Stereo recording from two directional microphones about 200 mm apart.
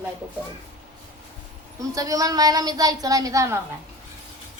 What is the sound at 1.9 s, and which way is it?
Speech, 15° right (ahead or behind).